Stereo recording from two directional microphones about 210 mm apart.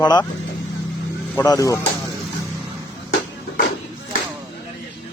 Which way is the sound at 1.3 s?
15° left (ahead or behind).